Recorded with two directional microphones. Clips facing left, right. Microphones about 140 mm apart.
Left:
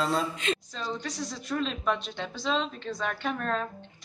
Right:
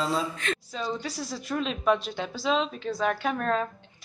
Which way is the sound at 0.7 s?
5° right (ahead or behind).